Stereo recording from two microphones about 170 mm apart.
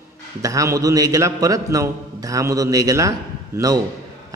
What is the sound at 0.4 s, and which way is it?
A man's voice, 20° right (ahead or behind).